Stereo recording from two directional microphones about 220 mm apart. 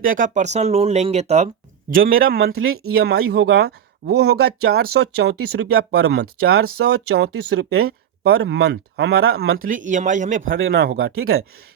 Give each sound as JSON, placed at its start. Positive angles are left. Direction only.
{"t": 0.0, "sound": "speech", "side_deg": -40}
{"t": 1.9, "sound": "speech", "side_deg": -40}
{"t": 2.6, "sound": "speech", "side_deg": -75}
{"t": 3.0, "sound": "speech", "side_deg": -45}
{"t": 5.7, "sound": "speech", "side_deg": -70}
{"t": 6.5, "sound": "speech", "side_deg": -45}
{"t": 7.8, "sound": "a sound", "side_deg": -45}
{"t": 8.3, "sound": "speech", "side_deg": -70}
{"t": 8.5, "sound": "speech", "side_deg": -45}
{"t": 10.7, "sound": "speech", "side_deg": -45}
{"t": 11.2, "sound": "speech", "side_deg": -70}